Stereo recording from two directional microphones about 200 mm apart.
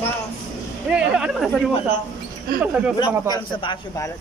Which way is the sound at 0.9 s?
5° right (ahead or behind).